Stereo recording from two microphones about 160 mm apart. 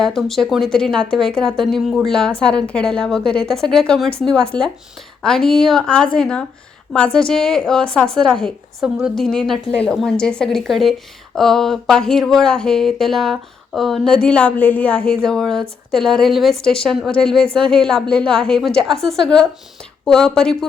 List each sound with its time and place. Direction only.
0.0 s speech: centre (ahead or behind)